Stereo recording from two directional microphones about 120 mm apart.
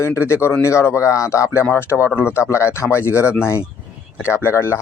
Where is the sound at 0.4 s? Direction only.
20° left (ahead or behind).